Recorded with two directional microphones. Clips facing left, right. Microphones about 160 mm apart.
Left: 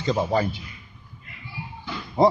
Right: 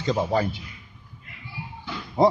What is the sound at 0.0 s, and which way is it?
Speech, 20° left (ahead or behind).